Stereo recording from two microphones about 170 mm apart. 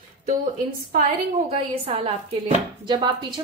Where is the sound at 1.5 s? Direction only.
35° right (ahead or behind).